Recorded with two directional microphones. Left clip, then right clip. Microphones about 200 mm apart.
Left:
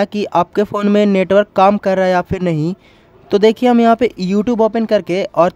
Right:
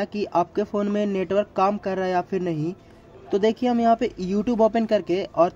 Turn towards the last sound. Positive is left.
turn(degrees=30)  # may be behind; listen again after turning